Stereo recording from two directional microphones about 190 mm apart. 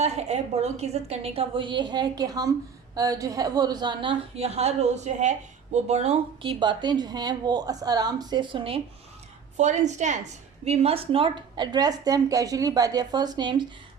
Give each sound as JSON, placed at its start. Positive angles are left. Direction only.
{"t": 0.0, "sound": "a woman's voice", "side_deg": -35}
{"t": 9.6, "sound": "a woman's voice", "side_deg": -40}